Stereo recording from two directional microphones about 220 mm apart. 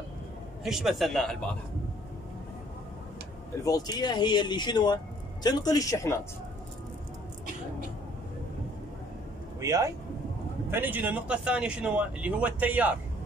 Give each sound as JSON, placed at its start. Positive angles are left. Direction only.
{"t": 0.7, "sound": "a man's voice", "side_deg": 0}
{"t": 3.6, "sound": "speech", "side_deg": 15}
{"t": 9.6, "sound": "a man's voice", "side_deg": -15}